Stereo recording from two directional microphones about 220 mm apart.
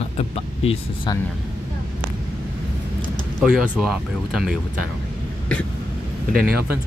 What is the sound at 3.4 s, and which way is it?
Speech, 5° right (ahead or behind).